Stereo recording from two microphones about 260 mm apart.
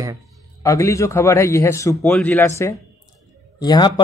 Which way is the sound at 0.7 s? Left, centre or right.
Centre.